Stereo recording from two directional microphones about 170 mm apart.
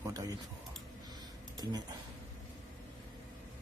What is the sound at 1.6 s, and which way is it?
Speech, 25° right (ahead or behind).